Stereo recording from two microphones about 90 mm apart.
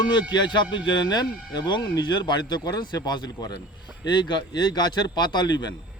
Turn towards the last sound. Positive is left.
turn(degrees=50)  # may be behind; listen again after turning